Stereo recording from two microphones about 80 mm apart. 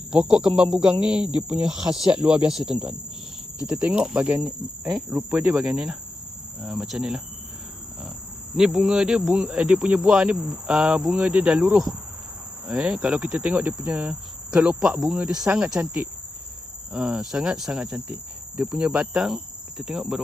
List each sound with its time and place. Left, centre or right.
0.1 s cricket: centre
5.5 s cricket: centre
8.5 s cricket: centre
16.9 s cricket: centre